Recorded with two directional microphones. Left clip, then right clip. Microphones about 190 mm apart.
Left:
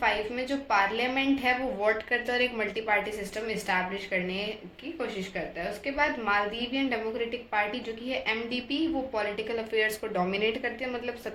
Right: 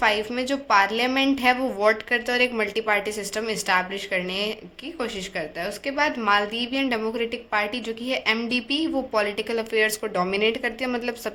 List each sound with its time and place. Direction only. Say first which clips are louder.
0.0 s a woman's voice: right 5 dB; 60° right (ahead or behind)
5.8 s a woman's voice: right 5 dB; 55° right (ahead or behind)